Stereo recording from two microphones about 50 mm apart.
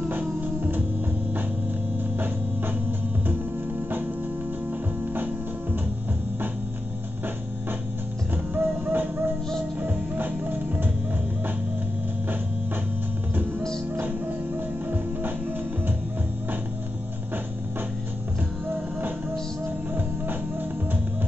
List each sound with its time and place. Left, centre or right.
0.1 s music: right
2.1 s music: right
5.1 s music: right
8.5 s music: right
14.0 s music: right
18.7 s music: right